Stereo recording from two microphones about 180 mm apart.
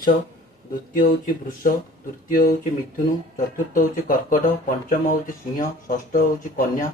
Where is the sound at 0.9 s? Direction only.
50° left (ahead or behind).